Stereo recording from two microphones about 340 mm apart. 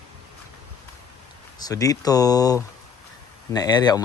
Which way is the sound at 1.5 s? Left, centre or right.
Centre.